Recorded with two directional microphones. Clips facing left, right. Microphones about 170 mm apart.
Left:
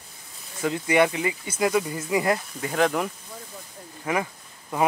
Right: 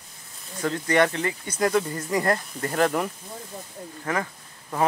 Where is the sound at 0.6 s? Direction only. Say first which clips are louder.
Left 1 dB; 10° left (ahead or behind).